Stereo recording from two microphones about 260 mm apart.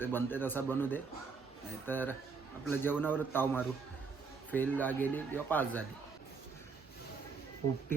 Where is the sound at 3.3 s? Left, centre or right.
Centre.